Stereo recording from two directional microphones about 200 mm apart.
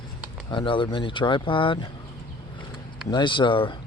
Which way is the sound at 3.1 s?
25° left (ahead or behind).